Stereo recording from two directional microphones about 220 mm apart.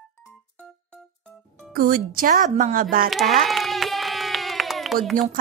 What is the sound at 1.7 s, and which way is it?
Speech, 40° right (ahead or behind).